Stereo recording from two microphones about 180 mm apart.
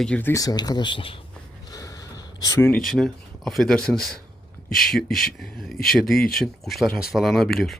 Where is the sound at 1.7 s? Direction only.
20° left (ahead or behind).